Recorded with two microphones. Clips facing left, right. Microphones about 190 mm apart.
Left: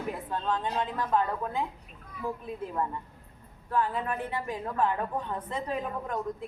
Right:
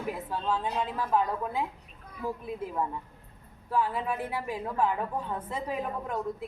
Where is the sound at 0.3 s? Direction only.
10° right (ahead or behind).